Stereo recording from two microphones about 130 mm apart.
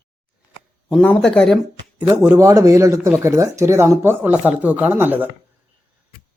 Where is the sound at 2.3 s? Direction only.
25° right (ahead or behind).